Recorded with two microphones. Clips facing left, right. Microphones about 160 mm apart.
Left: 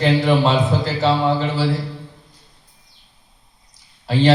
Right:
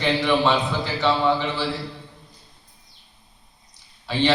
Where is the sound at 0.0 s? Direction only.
35° left (ahead or behind).